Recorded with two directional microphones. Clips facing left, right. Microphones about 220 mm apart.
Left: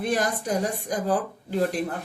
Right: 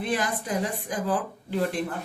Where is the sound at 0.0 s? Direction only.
45° left (ahead or behind).